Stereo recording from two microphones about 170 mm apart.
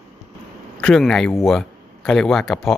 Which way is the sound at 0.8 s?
5° left (ahead or behind).